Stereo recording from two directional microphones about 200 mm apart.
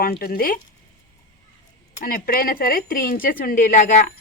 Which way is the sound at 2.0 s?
45° left (ahead or behind).